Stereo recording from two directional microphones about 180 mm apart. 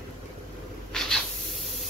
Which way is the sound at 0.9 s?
Centre (ahead or behind).